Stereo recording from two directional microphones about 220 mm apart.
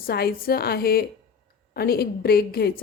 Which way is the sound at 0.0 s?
45° left (ahead or behind).